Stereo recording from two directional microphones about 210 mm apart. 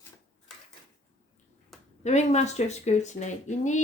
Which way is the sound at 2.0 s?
35° left (ahead or behind).